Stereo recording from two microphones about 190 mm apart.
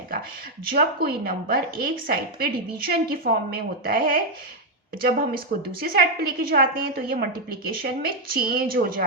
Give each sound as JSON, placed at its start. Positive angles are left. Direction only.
{"t": 0.8, "sound": "a woman's voice", "side_deg": -50}